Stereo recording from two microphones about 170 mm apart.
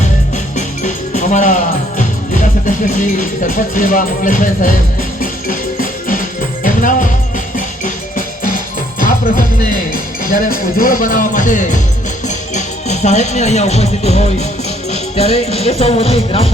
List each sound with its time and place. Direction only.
0.5 s music: 45° left (ahead or behind)
12.5 s speech: 45° left (ahead or behind)
15.1 s music: 40° left (ahead or behind)